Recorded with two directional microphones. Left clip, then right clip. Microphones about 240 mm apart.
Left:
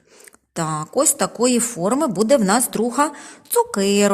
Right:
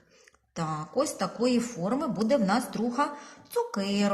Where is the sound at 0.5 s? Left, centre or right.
Left.